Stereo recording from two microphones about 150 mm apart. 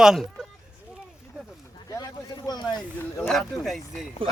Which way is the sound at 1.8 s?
25° left (ahead or behind).